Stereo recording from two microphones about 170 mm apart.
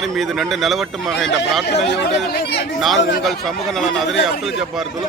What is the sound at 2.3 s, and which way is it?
Speech, 60° left (ahead or behind).